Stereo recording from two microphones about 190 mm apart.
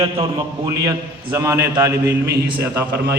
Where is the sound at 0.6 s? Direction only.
20° right (ahead or behind).